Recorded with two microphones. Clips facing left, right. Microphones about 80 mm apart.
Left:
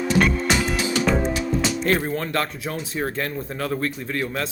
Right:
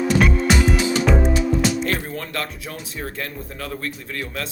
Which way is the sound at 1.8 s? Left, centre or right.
Left.